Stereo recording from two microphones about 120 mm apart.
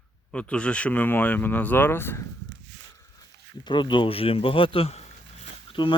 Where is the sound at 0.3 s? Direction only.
10° left (ahead or behind).